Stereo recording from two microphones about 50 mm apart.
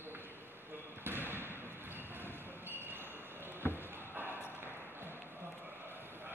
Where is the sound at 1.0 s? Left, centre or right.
Right.